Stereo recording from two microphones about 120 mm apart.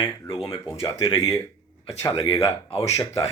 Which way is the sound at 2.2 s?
55° left (ahead or behind).